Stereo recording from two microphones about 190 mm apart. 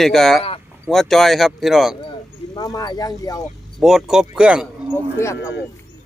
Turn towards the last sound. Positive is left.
turn(degrees=15)  # may be behind; listen again after turning